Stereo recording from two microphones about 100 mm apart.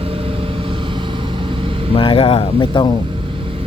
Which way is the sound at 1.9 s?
55° left (ahead or behind).